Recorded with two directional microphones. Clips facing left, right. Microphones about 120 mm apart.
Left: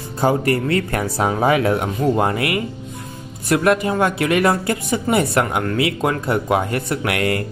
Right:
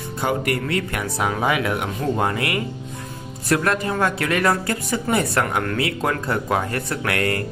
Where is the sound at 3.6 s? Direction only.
15° left (ahead or behind).